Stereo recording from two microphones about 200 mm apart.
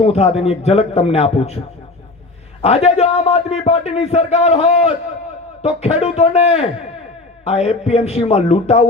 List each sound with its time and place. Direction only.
0.0 s a man's voice: 30° left (ahead or behind)